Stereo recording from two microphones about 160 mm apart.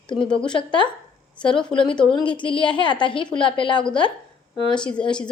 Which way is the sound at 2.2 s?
30° left (ahead or behind).